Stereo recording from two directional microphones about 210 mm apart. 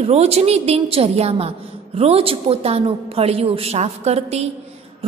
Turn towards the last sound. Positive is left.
turn(degrees=-30)  # may be behind; listen again after turning